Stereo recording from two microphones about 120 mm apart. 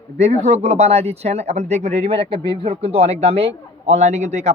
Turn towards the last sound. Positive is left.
turn(degrees=-75)  # may be behind; listen again after turning